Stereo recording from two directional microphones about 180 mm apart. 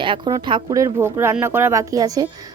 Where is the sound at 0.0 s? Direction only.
25° right (ahead or behind).